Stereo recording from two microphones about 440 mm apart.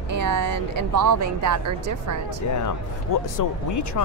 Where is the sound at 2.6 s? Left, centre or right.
Left.